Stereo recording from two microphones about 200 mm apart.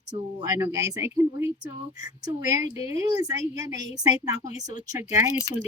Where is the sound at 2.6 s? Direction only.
30° left (ahead or behind).